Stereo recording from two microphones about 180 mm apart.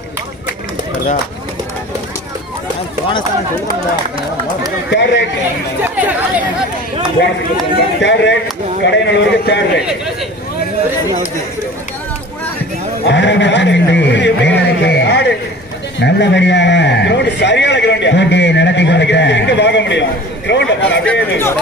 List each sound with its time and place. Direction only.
3.1 s speech: 25° left (ahead or behind)
4.9 s a man's voice: 70° left (ahead or behind)
5.9 s speech: 10° right (ahead or behind)
8.0 s a man's voice: 80° left
13.0 s a man's voice: 75° left (ahead or behind)
21.0 s speech: 10° left (ahead or behind)